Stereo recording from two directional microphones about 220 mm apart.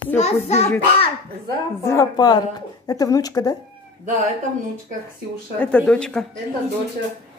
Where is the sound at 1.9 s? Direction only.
15° left (ahead or behind).